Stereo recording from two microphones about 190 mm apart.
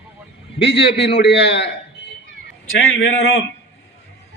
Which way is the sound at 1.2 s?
65° left (ahead or behind).